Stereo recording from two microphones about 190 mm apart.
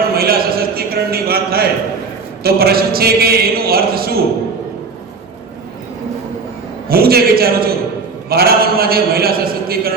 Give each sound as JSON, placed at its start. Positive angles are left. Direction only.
{"t": 0.1, "sound": "a sound", "side_deg": -55}
{"t": 2.4, "sound": "a man's voice", "side_deg": -55}
{"t": 6.8, "sound": "a man's voice", "side_deg": -55}